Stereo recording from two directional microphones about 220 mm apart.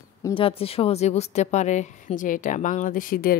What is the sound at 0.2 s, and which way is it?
A woman's voice, 25° left (ahead or behind).